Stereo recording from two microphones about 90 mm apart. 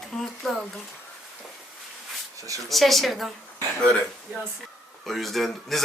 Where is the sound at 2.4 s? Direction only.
40° right (ahead or behind).